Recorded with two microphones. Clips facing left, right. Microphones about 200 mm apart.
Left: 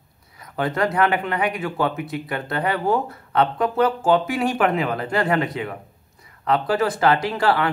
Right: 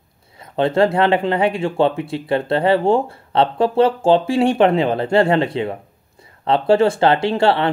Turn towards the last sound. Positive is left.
turn(degrees=-30)  # may be behind; listen again after turning